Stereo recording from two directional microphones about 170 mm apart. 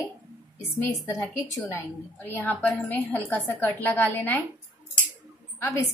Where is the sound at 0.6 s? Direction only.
20° left (ahead or behind).